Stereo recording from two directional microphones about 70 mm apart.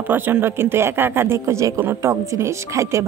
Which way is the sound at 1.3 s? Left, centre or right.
Right.